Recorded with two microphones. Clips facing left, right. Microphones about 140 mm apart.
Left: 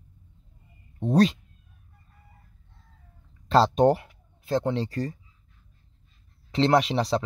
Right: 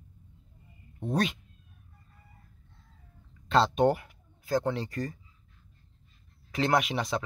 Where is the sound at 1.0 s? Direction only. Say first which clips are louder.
Left 8 dB; 35° left (ahead or behind).